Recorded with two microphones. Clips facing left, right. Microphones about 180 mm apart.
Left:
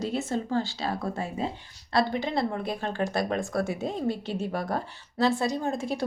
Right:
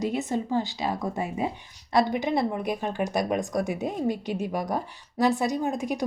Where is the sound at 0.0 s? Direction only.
15° right (ahead or behind).